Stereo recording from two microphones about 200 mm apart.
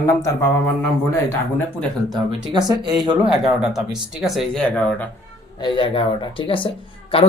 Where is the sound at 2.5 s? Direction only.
20° right (ahead or behind).